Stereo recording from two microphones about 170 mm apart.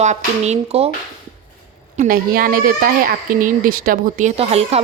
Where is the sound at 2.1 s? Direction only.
60° right (ahead or behind).